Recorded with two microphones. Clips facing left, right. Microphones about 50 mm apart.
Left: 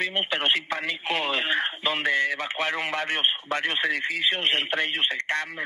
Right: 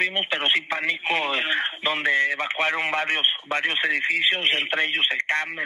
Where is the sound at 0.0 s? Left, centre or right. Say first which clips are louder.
Right 2 dB; right.